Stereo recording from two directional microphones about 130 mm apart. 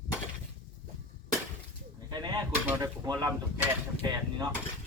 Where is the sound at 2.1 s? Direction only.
35° right (ahead or behind).